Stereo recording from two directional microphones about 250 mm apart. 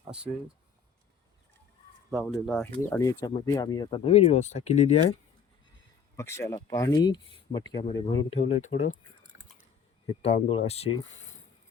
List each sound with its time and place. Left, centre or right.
2.2 s speech: centre; by 4.9 s left
6.1 s speech: centre; by 8.9 s left
10.1 s speech: left